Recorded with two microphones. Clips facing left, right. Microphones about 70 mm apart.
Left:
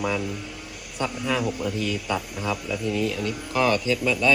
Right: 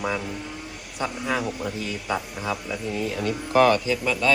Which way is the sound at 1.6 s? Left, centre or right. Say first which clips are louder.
Left 3 dB; right.